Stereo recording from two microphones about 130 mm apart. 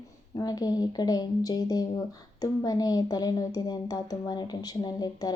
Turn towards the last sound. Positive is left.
turn(degrees=30)  # may be behind; listen again after turning